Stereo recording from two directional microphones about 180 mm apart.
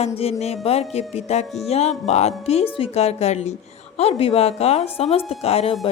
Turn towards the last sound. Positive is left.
turn(degrees=35)  # may be behind; listen again after turning